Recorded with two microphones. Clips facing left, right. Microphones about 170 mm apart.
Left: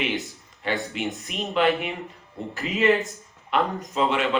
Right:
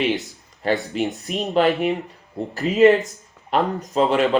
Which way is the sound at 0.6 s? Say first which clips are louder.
Right 6 dB; 40° right (ahead or behind).